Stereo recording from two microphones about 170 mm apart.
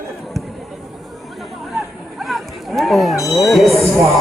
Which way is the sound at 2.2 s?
Centre (ahead or behind).